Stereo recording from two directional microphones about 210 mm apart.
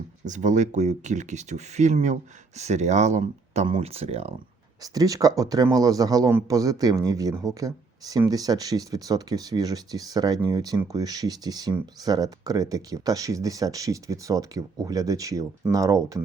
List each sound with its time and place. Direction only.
0.3 s speech: 35° right (ahead or behind)
4.8 s speech: 15° right (ahead or behind)